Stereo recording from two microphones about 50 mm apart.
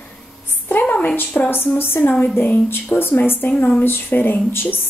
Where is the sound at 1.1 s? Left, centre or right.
Left.